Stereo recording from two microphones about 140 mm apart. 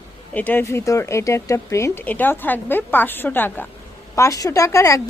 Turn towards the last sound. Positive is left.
turn(degrees=20)  # may be behind; listen again after turning